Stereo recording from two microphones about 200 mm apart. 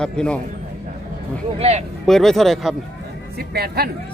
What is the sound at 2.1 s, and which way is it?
Speech, centre (ahead or behind).